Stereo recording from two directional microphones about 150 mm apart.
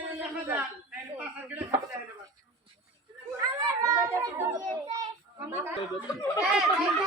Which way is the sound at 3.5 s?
20° right (ahead or behind).